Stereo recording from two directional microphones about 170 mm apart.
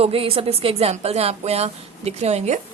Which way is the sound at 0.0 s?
35° right (ahead or behind).